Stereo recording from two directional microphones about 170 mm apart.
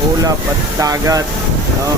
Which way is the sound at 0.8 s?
20° right (ahead or behind).